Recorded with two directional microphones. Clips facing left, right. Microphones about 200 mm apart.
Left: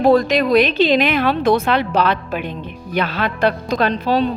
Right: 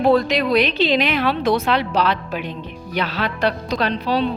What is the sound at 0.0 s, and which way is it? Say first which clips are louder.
A woman's voice: left 3 dB; 45° left (ahead or behind).